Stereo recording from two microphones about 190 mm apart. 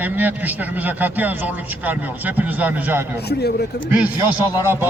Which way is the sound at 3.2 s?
60° left (ahead or behind).